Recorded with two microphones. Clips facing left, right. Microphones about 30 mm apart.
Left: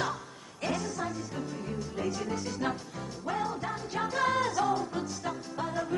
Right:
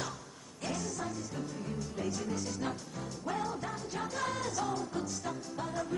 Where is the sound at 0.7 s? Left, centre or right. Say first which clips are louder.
Left 4 dB; left.